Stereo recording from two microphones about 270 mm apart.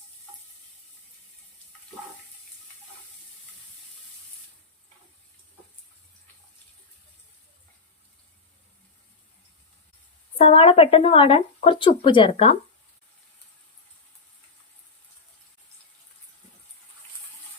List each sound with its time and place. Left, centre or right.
10.3 s speech: left